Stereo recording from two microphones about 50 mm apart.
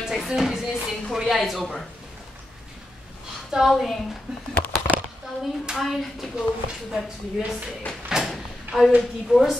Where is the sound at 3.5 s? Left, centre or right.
Centre.